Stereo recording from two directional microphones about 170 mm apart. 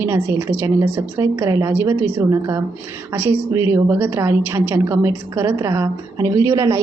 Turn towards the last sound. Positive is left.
turn(degrees=-15)  # may be behind; listen again after turning